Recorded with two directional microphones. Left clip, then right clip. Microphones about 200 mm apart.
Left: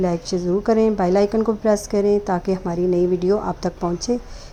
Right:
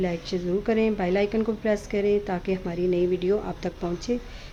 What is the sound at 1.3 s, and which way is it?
Speech, 5° left (ahead or behind).